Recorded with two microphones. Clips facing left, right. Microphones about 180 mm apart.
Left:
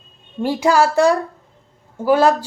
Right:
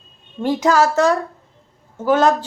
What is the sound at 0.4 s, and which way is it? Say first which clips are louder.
A woman's voice: even; 10° left (ahead or behind).